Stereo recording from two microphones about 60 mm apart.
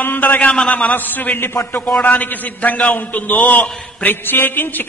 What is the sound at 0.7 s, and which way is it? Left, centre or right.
A man's voice, left.